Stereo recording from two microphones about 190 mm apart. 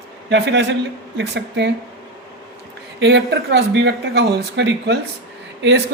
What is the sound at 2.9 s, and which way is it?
Speech, 70° right (ahead or behind).